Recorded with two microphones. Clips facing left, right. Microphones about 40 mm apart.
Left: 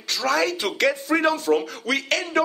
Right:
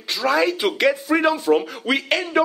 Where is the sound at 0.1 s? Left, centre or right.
Centre.